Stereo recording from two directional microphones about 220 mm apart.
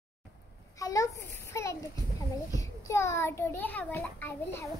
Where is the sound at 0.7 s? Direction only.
15° left (ahead or behind).